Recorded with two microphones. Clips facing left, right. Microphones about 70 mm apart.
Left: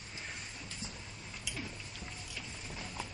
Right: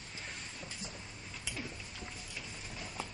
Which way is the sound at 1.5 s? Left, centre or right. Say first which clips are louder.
Even; right.